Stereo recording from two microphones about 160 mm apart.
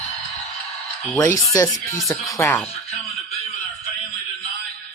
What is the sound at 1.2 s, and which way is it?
Speech, 20° left (ahead or behind).